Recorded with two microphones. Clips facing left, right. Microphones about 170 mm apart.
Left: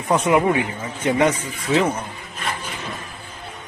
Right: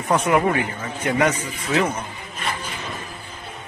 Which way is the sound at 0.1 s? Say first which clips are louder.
Left 2 dB; 15° left (ahead or behind).